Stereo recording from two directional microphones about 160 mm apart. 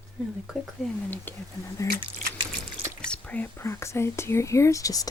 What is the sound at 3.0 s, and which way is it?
Speech, 10° left (ahead or behind).